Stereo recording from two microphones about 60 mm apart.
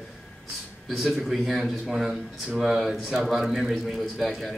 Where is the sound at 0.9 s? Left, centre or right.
Centre.